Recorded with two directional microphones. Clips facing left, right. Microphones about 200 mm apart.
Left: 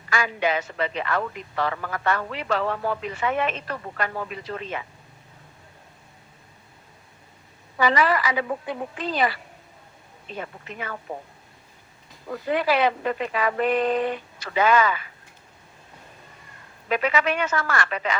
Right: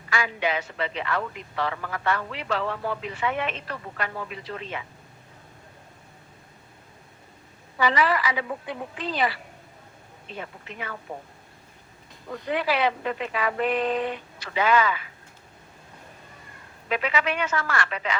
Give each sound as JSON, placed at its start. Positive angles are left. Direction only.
{"t": 0.1, "sound": "a man's voice", "side_deg": 45}
{"t": 7.8, "sound": "a man's voice", "side_deg": 45}
{"t": 11.1, "sound": "a man's voice", "side_deg": 45}
{"t": 12.5, "sound": "a man's voice", "side_deg": 45}
{"t": 16.9, "sound": "a man's voice", "side_deg": 45}